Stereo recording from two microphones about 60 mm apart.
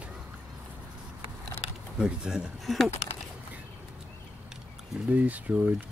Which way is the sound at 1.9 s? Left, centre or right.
Centre.